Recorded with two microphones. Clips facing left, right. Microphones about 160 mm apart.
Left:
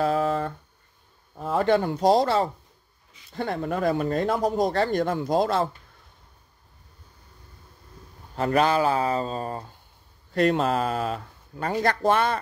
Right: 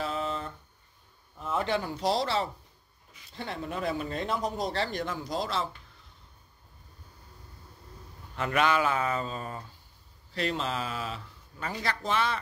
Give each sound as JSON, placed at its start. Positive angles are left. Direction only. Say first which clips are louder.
{"t": 0.0, "sound": "a sound", "louder": "left 9 dB", "side_deg": 50}
{"t": 1.3, "sound": "speech", "louder": "left 8 dB", "side_deg": 40}
{"t": 8.4, "sound": "speech", "louder": "left 5 dB", "side_deg": 35}
{"t": 10.3, "sound": "speech", "louder": "left 10 dB", "side_deg": 50}